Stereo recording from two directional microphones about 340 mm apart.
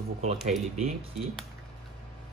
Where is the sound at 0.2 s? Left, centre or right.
Centre.